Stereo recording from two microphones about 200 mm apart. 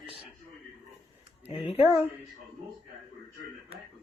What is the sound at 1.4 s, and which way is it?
Speech, 30° left (ahead or behind).